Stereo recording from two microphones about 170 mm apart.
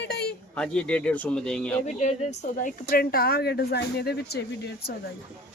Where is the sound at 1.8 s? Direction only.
40° left (ahead or behind).